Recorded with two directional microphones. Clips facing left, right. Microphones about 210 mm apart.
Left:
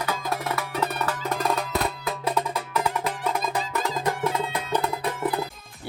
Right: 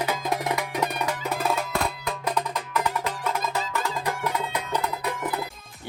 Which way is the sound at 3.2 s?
30° left (ahead or behind).